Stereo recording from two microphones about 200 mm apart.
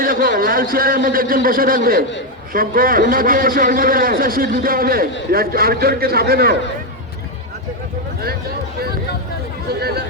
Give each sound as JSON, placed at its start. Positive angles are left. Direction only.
{"t": 0.0, "sound": "a man's voice", "side_deg": -45}